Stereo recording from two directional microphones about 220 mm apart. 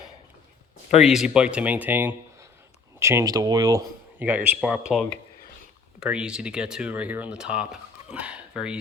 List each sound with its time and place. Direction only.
1.0 s speech: centre (ahead or behind)